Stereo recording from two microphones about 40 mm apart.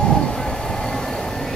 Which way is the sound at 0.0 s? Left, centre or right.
Left.